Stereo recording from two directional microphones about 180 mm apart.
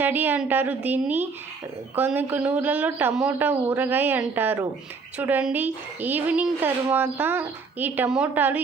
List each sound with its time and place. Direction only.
0.0 s a woman's voice: 10° right (ahead or behind)